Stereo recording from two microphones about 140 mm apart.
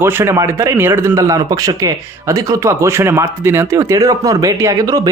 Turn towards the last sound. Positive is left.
turn(degrees=-25)  # may be behind; listen again after turning